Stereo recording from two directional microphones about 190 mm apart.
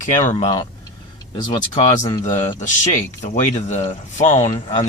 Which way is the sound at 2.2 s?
40° left (ahead or behind).